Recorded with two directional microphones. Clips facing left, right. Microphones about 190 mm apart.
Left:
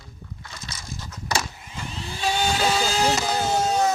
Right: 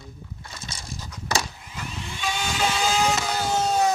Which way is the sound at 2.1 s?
35° left (ahead or behind).